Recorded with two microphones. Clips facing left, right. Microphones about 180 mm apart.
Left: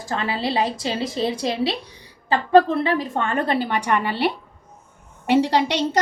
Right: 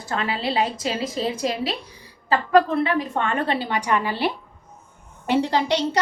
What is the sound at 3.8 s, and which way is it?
A woman's voice, 65° left (ahead or behind).